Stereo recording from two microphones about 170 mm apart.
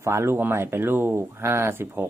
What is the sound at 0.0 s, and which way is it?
Speech, 15° right (ahead or behind).